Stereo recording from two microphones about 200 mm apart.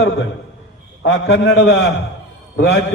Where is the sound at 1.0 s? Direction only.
60° left (ahead or behind).